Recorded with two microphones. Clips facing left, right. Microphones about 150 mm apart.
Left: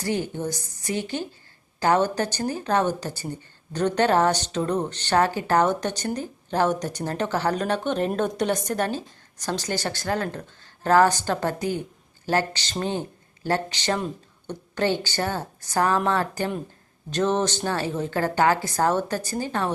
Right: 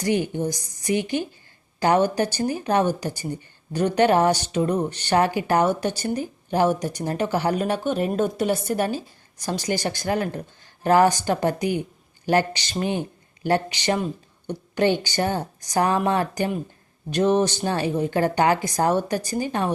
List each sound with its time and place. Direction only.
0.0 s speech: 15° right (ahead or behind)